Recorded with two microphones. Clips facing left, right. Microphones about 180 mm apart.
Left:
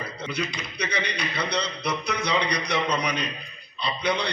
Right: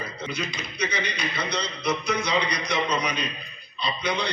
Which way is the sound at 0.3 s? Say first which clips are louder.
Left 1 dB; 65° left (ahead or behind).